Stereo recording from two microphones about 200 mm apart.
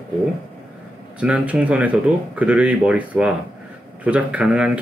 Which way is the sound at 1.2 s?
5° right (ahead or behind).